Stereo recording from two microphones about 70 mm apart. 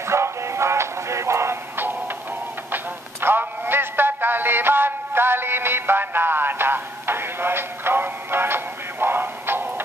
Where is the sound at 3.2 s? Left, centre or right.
Right.